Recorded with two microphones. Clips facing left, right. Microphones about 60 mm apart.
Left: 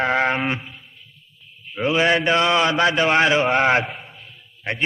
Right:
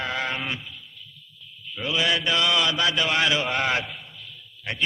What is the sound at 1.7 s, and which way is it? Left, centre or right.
A man's voice, left.